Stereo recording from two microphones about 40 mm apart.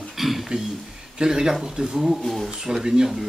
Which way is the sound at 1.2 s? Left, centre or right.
Centre.